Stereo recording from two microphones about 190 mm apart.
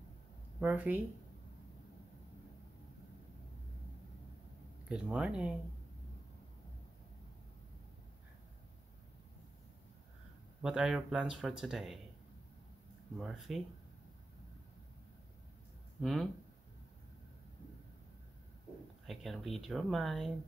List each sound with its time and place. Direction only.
0.6 s speech: 10° right (ahead or behind)
4.8 s speech: 5° right (ahead or behind)
10.6 s speech: 5° right (ahead or behind)
13.2 s speech: centre (ahead or behind)
16.0 s speech: centre (ahead or behind)
19.0 s speech: centre (ahead or behind)